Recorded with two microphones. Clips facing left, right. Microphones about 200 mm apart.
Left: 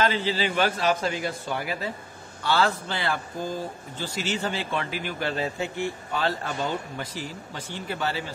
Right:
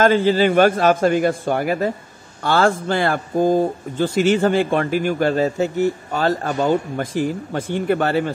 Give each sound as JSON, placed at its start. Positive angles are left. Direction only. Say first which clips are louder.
{"t": 0.0, "sound": "a man's voice", "louder": "right 10 dB", "side_deg": -50}